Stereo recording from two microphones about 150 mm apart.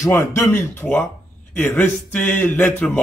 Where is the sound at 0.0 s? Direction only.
15° left (ahead or behind).